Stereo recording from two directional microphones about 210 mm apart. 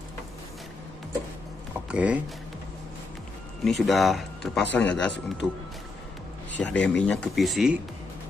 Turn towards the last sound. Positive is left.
turn(degrees=0)  # may be behind; listen again after turning